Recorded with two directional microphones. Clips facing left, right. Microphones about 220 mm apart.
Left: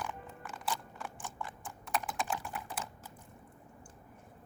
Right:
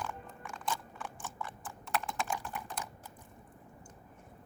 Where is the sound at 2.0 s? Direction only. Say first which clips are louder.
Even; 10° left (ahead or behind).